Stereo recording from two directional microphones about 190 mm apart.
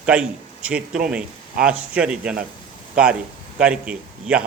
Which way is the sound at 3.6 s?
5° right (ahead or behind).